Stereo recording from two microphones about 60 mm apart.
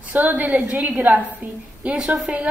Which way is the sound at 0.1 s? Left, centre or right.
Right.